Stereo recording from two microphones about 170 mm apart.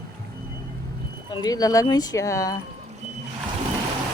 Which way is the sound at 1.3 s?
25° left (ahead or behind).